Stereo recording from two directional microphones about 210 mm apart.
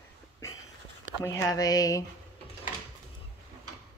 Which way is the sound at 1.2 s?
15° left (ahead or behind).